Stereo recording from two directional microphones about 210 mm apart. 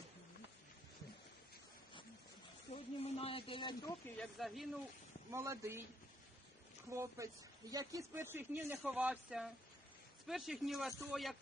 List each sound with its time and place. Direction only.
2.7 s snake: 30° left (ahead or behind)
4.2 s speech: centre (ahead or behind)
5.3 s speech: 15° right (ahead or behind)
6.9 s speech: 15° right (ahead or behind)